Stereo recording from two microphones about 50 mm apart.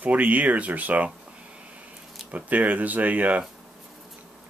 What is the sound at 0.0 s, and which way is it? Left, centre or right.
Speech, right.